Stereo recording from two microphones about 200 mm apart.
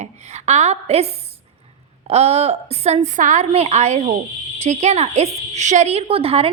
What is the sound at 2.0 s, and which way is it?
A woman's voice, 30° right (ahead or behind).